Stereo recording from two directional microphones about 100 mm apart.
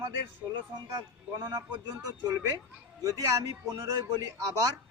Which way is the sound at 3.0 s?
35° right (ahead or behind).